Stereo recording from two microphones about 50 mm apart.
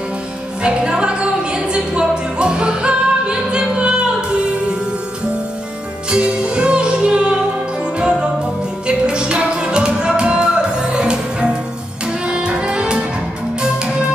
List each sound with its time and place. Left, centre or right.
0.6 s music: centre
6.0 s music: centre